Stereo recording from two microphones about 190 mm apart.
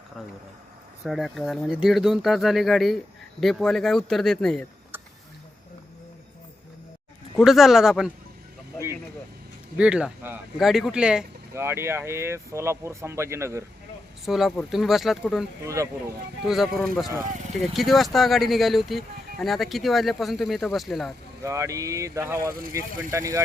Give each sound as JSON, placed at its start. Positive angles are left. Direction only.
{"t": 1.0, "sound": "speech", "side_deg": 0}
{"t": 7.3, "sound": "speech", "side_deg": 0}
{"t": 9.7, "sound": "speech", "side_deg": -5}
{"t": 14.3, "sound": "speech", "side_deg": 0}
{"t": 15.6, "sound": "speech", "side_deg": -15}
{"t": 16.4, "sound": "speech", "side_deg": 0}
{"t": 21.4, "sound": "speech", "side_deg": -15}